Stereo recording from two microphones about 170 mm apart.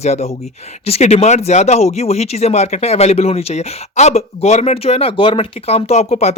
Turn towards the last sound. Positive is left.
turn(degrees=40)  # may be behind; listen again after turning